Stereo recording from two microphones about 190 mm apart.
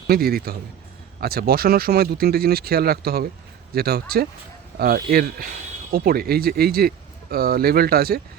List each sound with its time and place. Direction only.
0.1 s speech: 55° right (ahead or behind)